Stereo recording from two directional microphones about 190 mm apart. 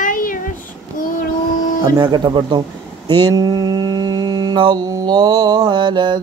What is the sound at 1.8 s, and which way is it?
Mantra, 25° right (ahead or behind).